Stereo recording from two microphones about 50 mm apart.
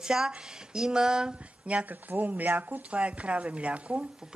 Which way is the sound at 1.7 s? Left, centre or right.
Right.